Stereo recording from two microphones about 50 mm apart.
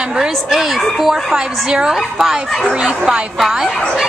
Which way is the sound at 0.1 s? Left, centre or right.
Centre.